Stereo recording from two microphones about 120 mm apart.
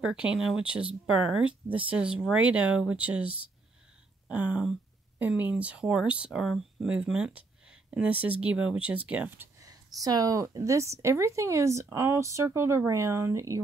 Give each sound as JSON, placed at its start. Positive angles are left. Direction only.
{"t": 0.0, "sound": "speech", "side_deg": -5}
{"t": 9.6, "sound": "a woman's voice", "side_deg": -30}